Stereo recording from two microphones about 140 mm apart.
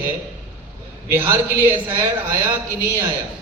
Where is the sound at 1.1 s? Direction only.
15° right (ahead or behind).